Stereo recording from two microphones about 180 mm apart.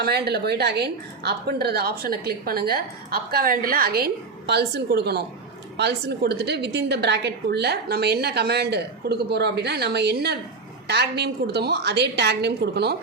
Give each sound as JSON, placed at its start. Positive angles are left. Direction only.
{"t": 0.0, "sound": "a woman's voice", "side_deg": -65}